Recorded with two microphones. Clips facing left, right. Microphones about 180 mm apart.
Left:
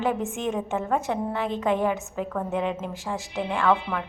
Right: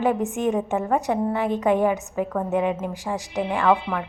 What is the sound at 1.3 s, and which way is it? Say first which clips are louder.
A woman's voice: right 4 dB; 15° right (ahead or behind).